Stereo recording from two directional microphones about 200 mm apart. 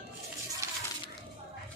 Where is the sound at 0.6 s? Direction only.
15° right (ahead or behind).